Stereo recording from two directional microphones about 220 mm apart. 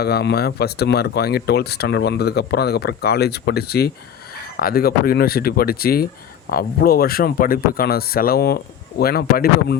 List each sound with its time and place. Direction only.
0.0 s speech: 45° left (ahead or behind)